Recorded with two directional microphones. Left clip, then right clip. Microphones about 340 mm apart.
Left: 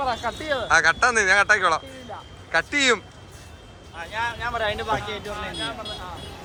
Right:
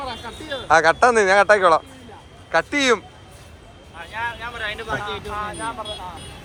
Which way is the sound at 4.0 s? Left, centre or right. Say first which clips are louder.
Left 1 dB; centre.